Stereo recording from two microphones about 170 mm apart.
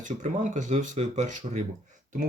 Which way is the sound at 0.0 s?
50° right (ahead or behind).